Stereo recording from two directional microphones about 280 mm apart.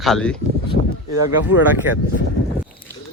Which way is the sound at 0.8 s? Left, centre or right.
Left.